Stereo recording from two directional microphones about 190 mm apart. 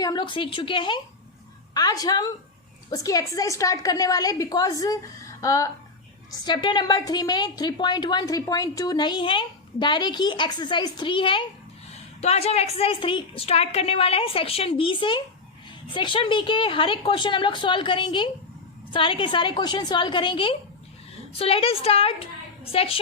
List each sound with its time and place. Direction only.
0.0 s a woman's voice: 20° left (ahead or behind)